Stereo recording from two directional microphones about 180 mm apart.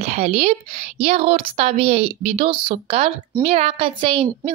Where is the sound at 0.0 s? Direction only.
35° right (ahead or behind).